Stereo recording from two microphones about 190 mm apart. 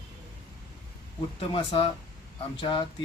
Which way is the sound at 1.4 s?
30° left (ahead or behind).